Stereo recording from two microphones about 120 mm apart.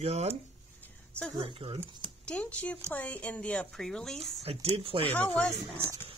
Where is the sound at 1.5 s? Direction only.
50° right (ahead or behind).